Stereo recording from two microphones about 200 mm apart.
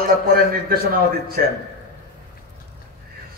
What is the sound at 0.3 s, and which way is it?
A man's voice, 45° right (ahead or behind).